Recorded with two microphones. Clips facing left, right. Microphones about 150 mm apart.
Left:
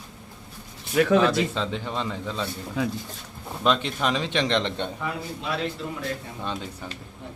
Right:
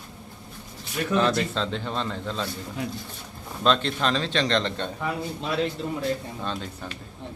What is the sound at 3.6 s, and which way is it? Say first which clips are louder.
A man's voice: right 1 dB; 10° left (ahead or behind).